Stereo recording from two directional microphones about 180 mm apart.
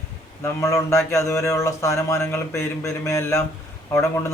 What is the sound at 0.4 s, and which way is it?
Speech, 15° left (ahead or behind).